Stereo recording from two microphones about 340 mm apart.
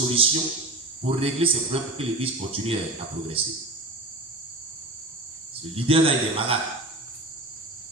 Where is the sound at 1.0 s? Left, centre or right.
Centre.